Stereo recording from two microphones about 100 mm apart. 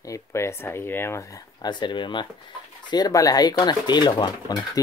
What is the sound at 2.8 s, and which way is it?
Speech, 40° left (ahead or behind).